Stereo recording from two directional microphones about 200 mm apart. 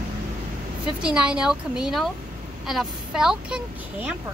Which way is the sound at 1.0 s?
5° right (ahead or behind).